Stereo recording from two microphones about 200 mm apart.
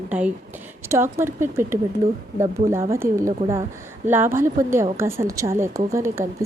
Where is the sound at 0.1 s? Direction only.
10° right (ahead or behind).